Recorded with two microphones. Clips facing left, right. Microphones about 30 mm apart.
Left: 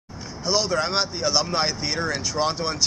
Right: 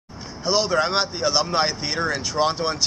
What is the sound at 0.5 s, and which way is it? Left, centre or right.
Speech, centre.